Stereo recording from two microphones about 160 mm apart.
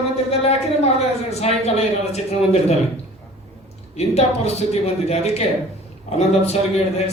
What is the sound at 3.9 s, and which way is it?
A man's voice, 40° left (ahead or behind).